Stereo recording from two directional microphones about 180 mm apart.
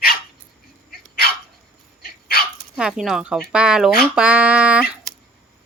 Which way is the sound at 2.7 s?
Centre (ahead or behind).